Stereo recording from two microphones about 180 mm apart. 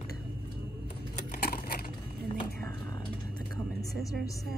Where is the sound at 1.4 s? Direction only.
55° left (ahead or behind).